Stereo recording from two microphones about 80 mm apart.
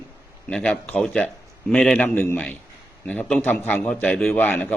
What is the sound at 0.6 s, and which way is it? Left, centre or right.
A man's voice, centre.